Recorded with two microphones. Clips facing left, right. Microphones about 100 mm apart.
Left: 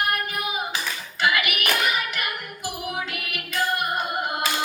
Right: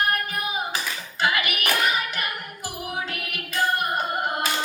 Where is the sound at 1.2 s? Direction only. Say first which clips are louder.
Left 1 dB; 30° right (ahead or behind).